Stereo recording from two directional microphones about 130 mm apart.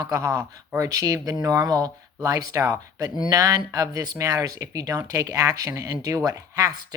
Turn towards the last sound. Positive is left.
turn(degrees=-30)  # may be behind; listen again after turning